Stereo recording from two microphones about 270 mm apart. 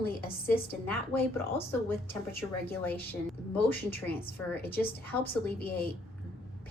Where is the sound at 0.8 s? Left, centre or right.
Centre.